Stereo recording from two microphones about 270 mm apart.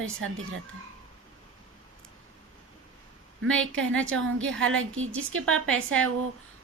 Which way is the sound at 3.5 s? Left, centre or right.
Centre.